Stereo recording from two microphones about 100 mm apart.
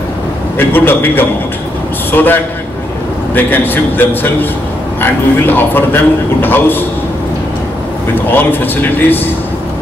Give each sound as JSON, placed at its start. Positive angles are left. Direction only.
{"t": 0.6, "sound": "a man's voice", "side_deg": 20}
{"t": 8.3, "sound": "a man's voice", "side_deg": 20}